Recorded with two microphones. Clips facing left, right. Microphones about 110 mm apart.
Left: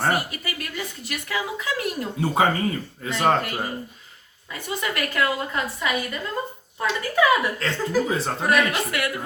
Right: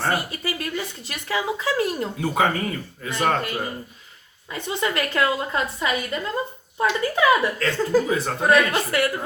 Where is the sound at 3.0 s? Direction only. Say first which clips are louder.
Left 2 dB; 30° left (ahead or behind).